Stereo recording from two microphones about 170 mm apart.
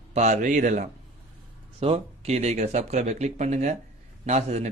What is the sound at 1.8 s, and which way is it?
Speech, 35° right (ahead or behind).